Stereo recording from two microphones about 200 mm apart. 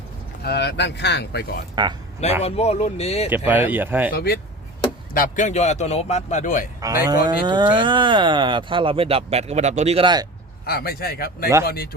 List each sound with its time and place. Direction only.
0.4 s speech: 55° left (ahead or behind)
1.7 s speech: 20° right (ahead or behind)
2.4 s a man's voice: 30° left (ahead or behind)
3.2 s speech: 10° right (ahead or behind)
4.1 s a man's voice: 50° left (ahead or behind)
7.1 s speech: 20° right (ahead or behind)
10.7 s speech: 50° left (ahead or behind)